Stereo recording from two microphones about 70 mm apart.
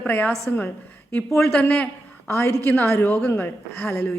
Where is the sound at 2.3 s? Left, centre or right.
Left.